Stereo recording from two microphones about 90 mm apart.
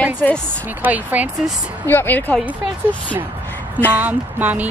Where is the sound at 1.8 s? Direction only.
25° left (ahead or behind).